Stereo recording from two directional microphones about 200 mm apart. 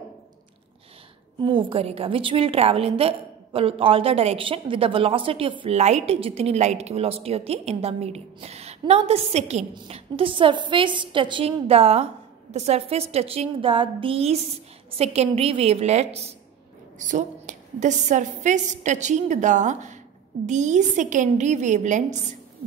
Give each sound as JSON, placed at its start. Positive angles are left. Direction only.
{"t": 1.4, "sound": "a woman's voice", "side_deg": -25}